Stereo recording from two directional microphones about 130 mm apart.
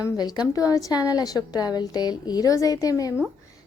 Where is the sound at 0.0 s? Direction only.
30° left (ahead or behind).